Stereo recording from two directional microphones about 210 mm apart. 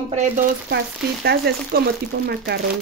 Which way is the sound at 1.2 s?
50° right (ahead or behind).